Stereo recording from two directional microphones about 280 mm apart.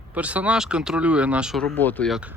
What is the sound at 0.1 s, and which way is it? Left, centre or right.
Speech, centre.